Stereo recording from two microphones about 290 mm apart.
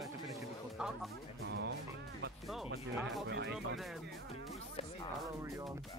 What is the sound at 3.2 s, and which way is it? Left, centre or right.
Speech, right.